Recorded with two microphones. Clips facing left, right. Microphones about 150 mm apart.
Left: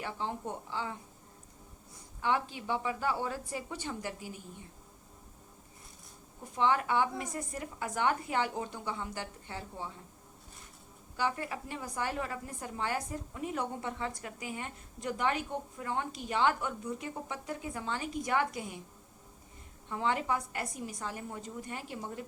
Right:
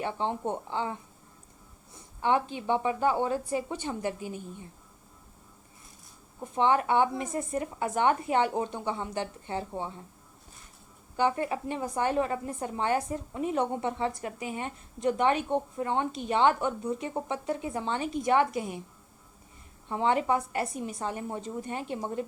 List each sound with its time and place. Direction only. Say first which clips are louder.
0.0 s a woman's voice: right 7 dB; 25° right (ahead or behind)
2.2 s a woman's voice: right 5 dB; 20° right (ahead or behind)
6.4 s a woman's voice: right 4 dB; 20° right (ahead or behind)
11.2 s a woman's voice: right 7 dB; 25° right (ahead or behind)
19.9 s a woman's voice: right 6 dB; 20° right (ahead or behind)